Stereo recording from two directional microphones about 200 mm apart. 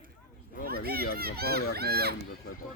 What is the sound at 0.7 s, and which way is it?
Children playing, 50° right (ahead or behind).